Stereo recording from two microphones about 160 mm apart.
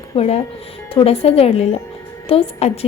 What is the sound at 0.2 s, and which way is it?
A woman's voice, 40° left (ahead or behind).